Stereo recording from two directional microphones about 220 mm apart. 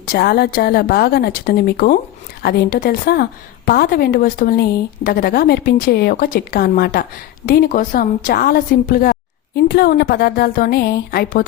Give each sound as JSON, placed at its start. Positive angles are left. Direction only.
{"t": 0.0, "sound": "a woman's voice", "side_deg": 45}